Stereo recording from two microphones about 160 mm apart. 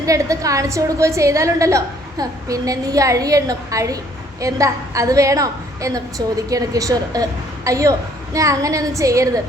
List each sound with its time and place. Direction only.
0.0 s a woman's voice: 20° right (ahead or behind)